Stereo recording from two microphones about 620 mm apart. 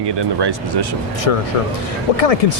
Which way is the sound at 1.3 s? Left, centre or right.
Left.